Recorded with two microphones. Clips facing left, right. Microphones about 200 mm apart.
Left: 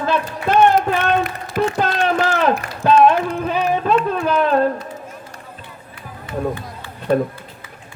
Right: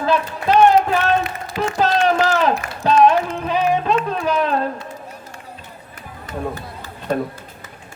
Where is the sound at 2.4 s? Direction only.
50° left (ahead or behind).